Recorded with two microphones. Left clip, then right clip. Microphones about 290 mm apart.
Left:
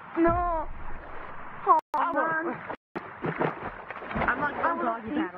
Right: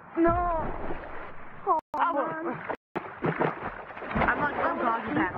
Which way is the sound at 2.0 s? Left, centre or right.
Centre.